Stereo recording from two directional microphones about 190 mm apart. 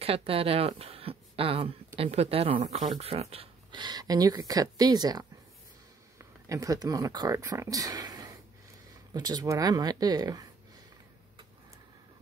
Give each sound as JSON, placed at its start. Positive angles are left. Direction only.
{"t": 0.0, "sound": "speech", "side_deg": -30}